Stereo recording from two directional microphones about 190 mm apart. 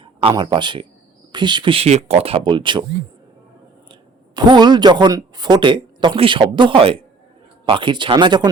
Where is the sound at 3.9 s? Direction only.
25° right (ahead or behind).